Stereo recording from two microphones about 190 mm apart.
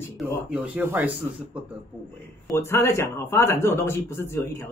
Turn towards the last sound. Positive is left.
turn(degrees=15)  # may be behind; listen again after turning